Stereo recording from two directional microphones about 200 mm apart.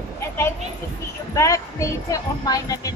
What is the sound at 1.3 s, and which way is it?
Speech, 15° left (ahead or behind).